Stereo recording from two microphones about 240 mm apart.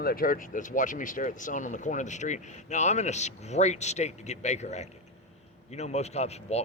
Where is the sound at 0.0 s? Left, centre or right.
Left.